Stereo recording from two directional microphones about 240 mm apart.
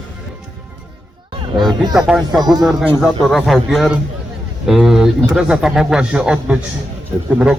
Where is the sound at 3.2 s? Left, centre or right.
Centre.